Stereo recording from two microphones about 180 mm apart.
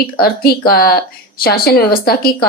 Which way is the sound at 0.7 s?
55° left (ahead or behind).